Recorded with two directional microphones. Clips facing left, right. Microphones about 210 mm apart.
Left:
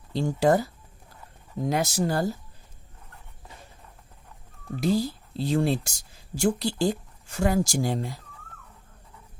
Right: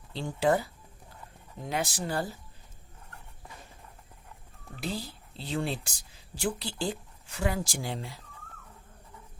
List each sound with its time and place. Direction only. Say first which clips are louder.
0.1 s speech: left 5 dB; 40° left (ahead or behind)
4.8 s speech: left 11 dB; 40° left (ahead or behind)